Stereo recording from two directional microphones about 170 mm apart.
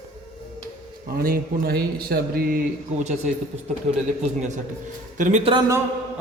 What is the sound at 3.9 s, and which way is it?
Speech, 40° right (ahead or behind).